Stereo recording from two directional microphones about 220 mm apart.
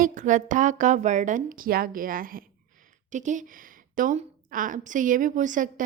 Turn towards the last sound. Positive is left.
turn(degrees=-35)  # may be behind; listen again after turning